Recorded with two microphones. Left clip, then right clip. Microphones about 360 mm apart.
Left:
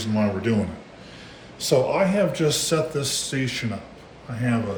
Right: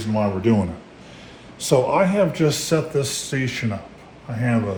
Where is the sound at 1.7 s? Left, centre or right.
Right.